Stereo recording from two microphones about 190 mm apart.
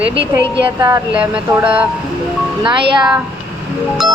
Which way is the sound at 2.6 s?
25° right (ahead or behind).